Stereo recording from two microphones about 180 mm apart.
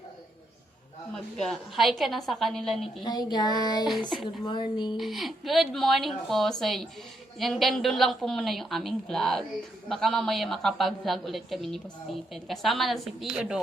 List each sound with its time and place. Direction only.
1.1 s a woman's voice: 5° left (ahead or behind)
3.0 s a sound: 25° left (ahead or behind)
4.9 s a woman's voice: centre (ahead or behind)